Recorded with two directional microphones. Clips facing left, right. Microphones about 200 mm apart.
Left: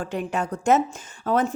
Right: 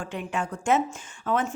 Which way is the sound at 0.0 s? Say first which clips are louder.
Left 4 dB; 40° left (ahead or behind).